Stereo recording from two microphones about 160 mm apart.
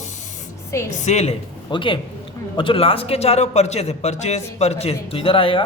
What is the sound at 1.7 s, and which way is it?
A man's voice, 30° left (ahead or behind).